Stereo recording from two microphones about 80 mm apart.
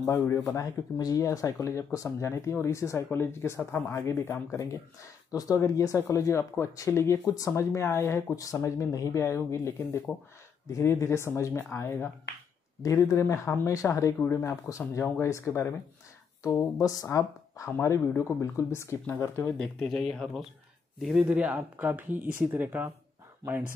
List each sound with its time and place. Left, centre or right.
0.0 s speech: left
0.4 s speech: left
5.3 s speech: left
5.6 s speech: left
10.1 s speech: centre
10.7 s speech: left
16.4 s speech: left
19.6 s speech: centre
21.1 s speech: centre